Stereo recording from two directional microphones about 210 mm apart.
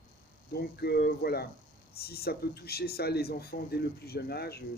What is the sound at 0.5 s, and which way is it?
Speech, 50° left (ahead or behind).